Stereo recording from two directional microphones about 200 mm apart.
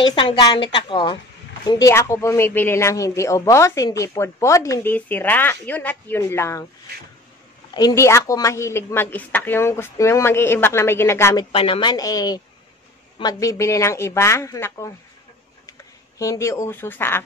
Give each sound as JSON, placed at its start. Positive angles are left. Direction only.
{"t": 0.0, "sound": "a woman's voice", "side_deg": 25}
{"t": 7.7, "sound": "speech", "side_deg": 15}
{"t": 11.5, "sound": "a woman's voice", "side_deg": 25}
{"t": 16.2, "sound": "speech", "side_deg": 15}